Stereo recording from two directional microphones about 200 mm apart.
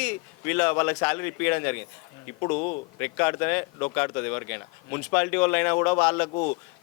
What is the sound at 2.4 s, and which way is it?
Speech, 30° left (ahead or behind).